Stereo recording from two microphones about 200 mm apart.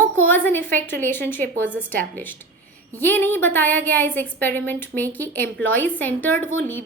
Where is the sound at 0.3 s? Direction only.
10° left (ahead or behind).